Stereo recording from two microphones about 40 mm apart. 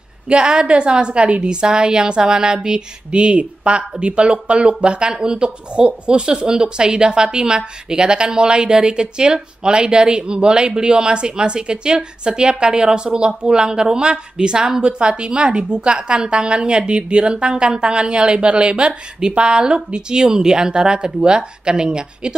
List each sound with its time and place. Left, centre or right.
0.3 s speech: right